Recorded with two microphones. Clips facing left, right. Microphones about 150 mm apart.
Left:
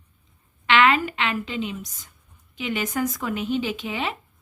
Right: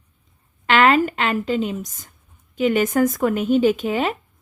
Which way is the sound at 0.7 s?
40° right (ahead or behind).